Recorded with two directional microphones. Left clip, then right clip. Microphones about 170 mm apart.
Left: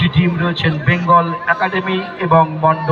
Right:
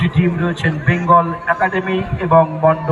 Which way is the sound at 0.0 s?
10° right (ahead or behind).